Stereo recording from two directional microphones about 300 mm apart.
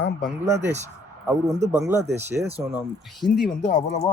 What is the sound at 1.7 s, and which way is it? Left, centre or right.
Speech, centre.